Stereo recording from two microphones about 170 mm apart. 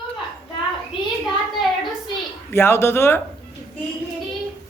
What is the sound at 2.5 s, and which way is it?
Speech, 15° left (ahead or behind).